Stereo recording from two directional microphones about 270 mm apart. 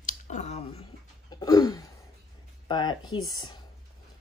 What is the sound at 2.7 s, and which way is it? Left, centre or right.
Speech, centre.